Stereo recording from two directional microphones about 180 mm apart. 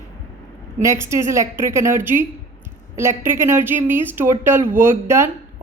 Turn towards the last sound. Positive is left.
turn(degrees=-15)  # may be behind; listen again after turning